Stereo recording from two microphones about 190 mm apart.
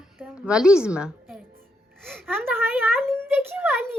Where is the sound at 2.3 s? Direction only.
10° right (ahead or behind).